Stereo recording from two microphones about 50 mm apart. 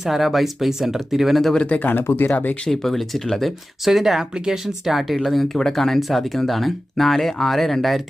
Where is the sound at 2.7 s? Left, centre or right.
Centre.